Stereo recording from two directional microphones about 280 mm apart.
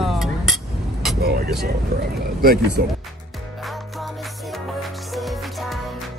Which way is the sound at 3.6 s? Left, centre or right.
Centre.